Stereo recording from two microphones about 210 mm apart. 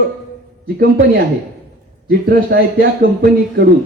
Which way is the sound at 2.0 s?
50° right (ahead or behind).